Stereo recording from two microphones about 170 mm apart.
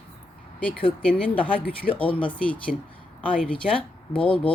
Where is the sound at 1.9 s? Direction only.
30° left (ahead or behind).